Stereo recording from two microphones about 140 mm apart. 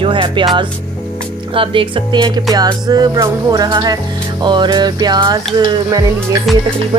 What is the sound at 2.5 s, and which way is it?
Music, 30° right (ahead or behind).